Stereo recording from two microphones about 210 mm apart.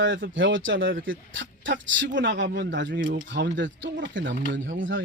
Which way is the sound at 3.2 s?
60° right (ahead or behind).